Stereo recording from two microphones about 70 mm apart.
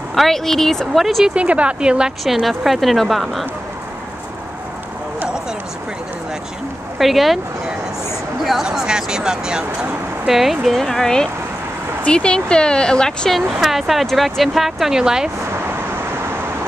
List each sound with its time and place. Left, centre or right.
0.1 s speech: centre
1.3 s speech: centre
2.2 s speech: centre
7.0 s speech: centre
13.6 s speech: centre